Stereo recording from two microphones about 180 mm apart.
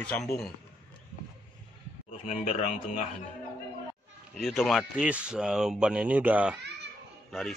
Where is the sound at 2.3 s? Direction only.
35° left (ahead or behind).